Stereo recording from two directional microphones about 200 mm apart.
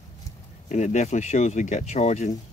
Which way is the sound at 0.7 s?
35° left (ahead or behind).